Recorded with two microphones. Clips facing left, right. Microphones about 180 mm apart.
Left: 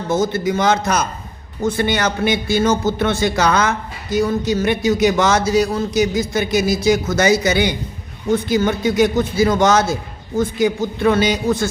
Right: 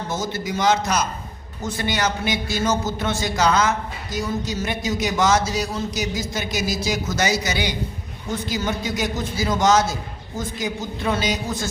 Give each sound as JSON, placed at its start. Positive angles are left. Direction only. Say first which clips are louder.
{"t": 0.1, "sound": "a man's voice", "louder": "left 11 dB", "side_deg": 55}